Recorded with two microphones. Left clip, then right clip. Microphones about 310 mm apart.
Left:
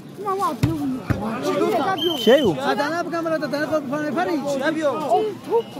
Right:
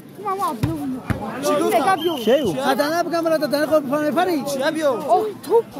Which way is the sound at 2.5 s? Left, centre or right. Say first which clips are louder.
Right 3 dB; right.